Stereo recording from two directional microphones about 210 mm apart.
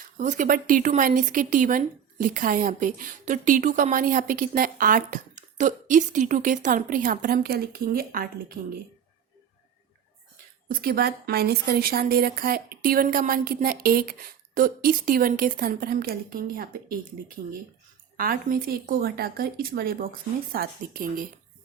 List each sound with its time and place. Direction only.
0.2 s speech: 40° right (ahead or behind)
10.7 s a woman's voice: 45° right (ahead or behind)
18.2 s a woman's voice: 40° right (ahead or behind)